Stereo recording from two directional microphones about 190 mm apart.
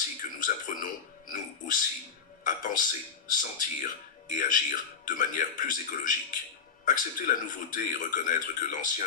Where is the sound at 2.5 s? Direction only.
45° left (ahead or behind).